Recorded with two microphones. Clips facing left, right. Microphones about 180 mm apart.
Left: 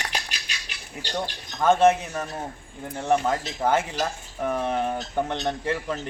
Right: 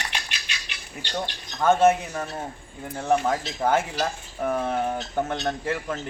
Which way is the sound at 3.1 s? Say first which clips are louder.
Even; 5° right (ahead or behind).